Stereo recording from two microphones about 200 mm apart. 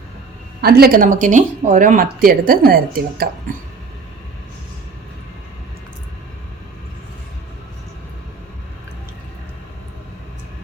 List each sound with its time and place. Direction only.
0.6 s speech: 50° right (ahead or behind)